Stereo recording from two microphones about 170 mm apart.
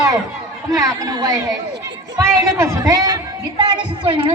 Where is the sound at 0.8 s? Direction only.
20° right (ahead or behind).